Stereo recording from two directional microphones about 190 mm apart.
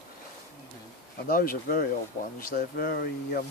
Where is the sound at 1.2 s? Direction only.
50° left (ahead or behind).